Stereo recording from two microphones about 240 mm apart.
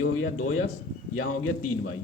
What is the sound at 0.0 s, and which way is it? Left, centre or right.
A man's voice, left.